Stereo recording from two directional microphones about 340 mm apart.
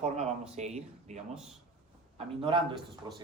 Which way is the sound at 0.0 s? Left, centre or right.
Centre.